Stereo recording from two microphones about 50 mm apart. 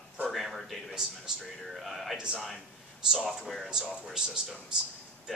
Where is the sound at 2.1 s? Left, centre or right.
Centre.